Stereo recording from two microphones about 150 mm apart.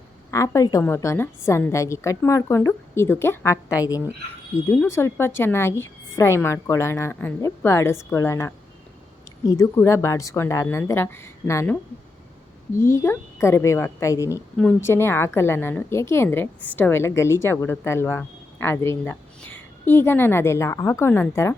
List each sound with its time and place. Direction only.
0.3 s a woman's voice: 20° left (ahead or behind)
12.8 s a woman's voice: 15° left (ahead or behind)